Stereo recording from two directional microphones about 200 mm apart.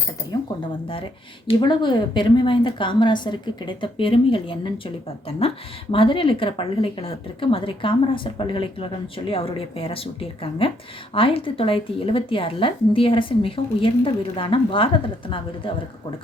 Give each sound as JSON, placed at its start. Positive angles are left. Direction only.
{"t": 1.5, "sound": "a woman's voice", "side_deg": 25}
{"t": 5.9, "sound": "a woman's voice", "side_deg": 25}